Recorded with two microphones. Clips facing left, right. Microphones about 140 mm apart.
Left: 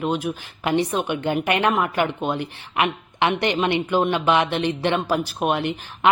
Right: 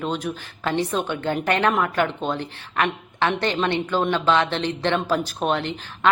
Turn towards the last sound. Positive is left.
turn(degrees=15)  # may be behind; listen again after turning